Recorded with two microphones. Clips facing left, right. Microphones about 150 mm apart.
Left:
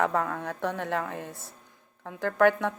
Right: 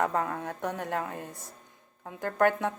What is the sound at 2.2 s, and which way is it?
Speech, 90° left.